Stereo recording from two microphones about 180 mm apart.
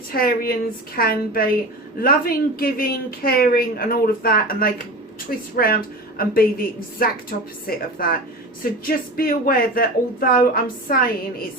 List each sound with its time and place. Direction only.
0.1 s speech: 55° left (ahead or behind)